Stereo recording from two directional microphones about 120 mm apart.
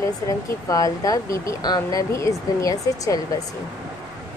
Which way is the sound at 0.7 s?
30° left (ahead or behind).